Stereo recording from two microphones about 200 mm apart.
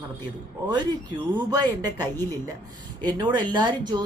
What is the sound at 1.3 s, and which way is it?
Speech, 20° right (ahead or behind).